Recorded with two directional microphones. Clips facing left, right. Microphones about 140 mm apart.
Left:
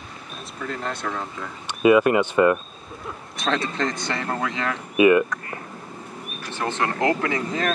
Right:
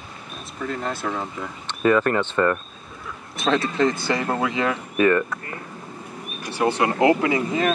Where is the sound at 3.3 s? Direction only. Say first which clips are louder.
Right 4 dB; centre (ahead or behind).